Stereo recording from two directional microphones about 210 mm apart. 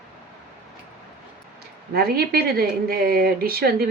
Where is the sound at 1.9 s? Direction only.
45° right (ahead or behind).